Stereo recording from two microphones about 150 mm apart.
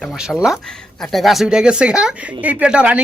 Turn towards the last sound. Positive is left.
turn(degrees=-5)  # may be behind; listen again after turning